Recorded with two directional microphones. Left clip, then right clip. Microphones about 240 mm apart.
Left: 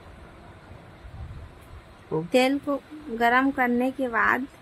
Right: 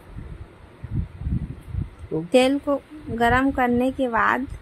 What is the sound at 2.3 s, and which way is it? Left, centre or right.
A woman's voice, centre.